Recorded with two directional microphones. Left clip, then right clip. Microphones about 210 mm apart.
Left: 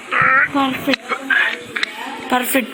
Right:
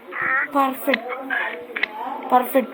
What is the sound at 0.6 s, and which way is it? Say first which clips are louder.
Speech: left 1 dB; 10° right (ahead or behind).